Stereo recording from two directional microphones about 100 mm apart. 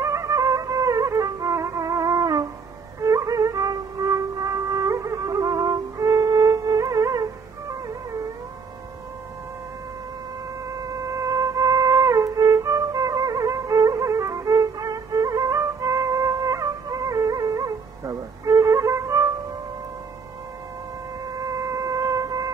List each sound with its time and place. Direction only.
0.0 s music: 30° right (ahead or behind)
10.8 s a sound: 35° right (ahead or behind)
11.6 s music: 45° right (ahead or behind)
13.1 s music: 50° right (ahead or behind)
13.4 s music: 35° right (ahead or behind)
21.5 s a sound: 35° right (ahead or behind)